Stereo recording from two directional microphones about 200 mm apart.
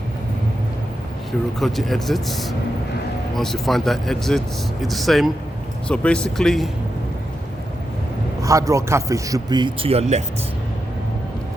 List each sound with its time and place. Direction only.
1.5 s speech: centre (ahead or behind)
8.4 s a man's voice: 15° right (ahead or behind); by 10.2 s 35° right (ahead or behind)